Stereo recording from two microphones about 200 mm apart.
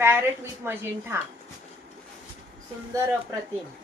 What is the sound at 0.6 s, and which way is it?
Speech, 10° right (ahead or behind).